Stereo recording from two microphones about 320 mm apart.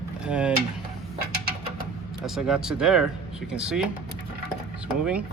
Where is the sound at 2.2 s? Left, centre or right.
Centre.